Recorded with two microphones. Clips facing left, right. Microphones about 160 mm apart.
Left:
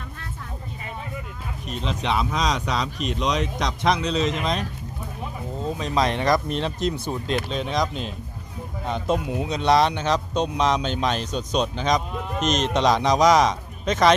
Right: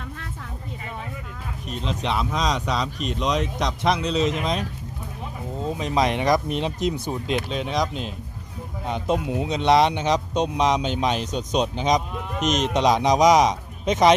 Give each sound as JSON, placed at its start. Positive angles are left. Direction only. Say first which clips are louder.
{"t": 1.7, "sound": "speech", "louder": "left 1 dB", "side_deg": 0}
{"t": 5.7, "sound": "speech", "louder": "right 1 dB", "side_deg": -20}
{"t": 8.9, "sound": "speech", "louder": "even", "side_deg": -15}